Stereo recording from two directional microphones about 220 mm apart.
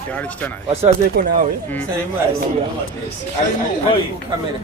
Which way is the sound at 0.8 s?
35° right (ahead or behind).